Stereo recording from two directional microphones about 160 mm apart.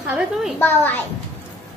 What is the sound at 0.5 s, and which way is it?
Speech, 15° left (ahead or behind).